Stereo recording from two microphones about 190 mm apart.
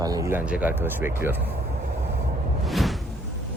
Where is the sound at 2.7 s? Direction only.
Centre (ahead or behind).